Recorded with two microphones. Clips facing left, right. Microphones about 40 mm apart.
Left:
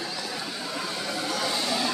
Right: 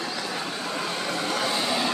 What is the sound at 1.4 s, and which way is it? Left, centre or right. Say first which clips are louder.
Vehicle: right 2 dB; right.